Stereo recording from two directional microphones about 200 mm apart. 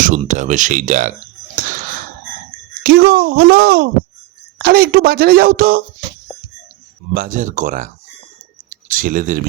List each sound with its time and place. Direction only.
0.0 s speech: 40° right (ahead or behind)
2.8 s a woman's voice: 50° right (ahead or behind)
7.1 s speech: 45° right (ahead or behind)
8.7 s clicking: 40° right (ahead or behind)